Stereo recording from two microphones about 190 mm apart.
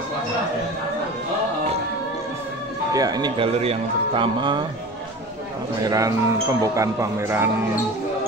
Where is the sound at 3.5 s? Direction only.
30° right (ahead or behind).